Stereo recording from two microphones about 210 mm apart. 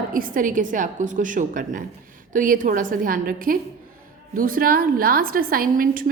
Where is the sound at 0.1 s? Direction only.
40° right (ahead or behind).